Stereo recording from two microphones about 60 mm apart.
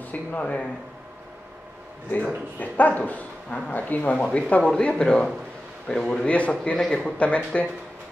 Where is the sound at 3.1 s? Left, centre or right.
Left.